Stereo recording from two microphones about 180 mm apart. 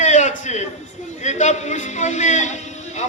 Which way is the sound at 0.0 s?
40° left (ahead or behind).